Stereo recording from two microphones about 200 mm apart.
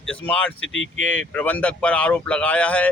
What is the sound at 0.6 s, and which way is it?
Speech, 70° left (ahead or behind).